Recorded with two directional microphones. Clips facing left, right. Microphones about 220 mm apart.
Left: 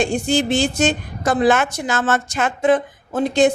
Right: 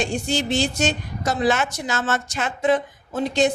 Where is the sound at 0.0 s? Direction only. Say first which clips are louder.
Left 5 dB; 50° left (ahead or behind).